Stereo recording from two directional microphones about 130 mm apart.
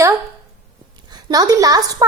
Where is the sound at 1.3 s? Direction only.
30° right (ahead or behind).